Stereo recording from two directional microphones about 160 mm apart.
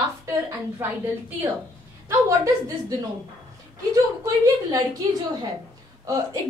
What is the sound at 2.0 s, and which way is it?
Speech, 20° right (ahead or behind).